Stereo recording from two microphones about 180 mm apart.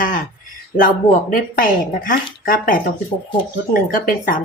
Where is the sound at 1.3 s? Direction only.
50° left (ahead or behind).